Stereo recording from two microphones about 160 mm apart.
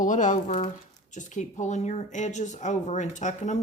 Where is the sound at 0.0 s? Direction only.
50° left (ahead or behind).